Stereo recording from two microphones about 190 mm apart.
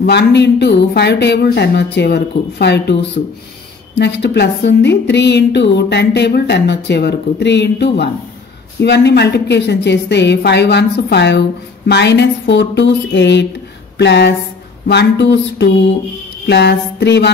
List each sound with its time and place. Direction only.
0.0 s a woman's voice: 60° left (ahead or behind)
4.0 s a woman's voice: 65° left (ahead or behind)